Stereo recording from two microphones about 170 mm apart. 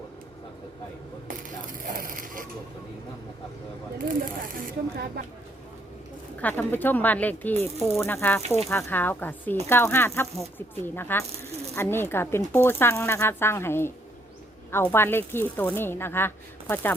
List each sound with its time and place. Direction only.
1.9 s crushing: 55° right (ahead or behind)
4.5 s speech: 60° right (ahead or behind)
6.4 s speech: 10° left (ahead or behind)